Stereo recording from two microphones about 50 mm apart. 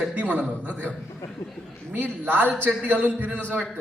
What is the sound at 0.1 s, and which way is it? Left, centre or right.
Speech, right.